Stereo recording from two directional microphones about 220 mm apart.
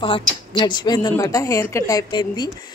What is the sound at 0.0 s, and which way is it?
A woman's voice, 20° left (ahead or behind).